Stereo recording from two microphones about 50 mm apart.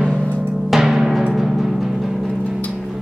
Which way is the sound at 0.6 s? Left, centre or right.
Centre.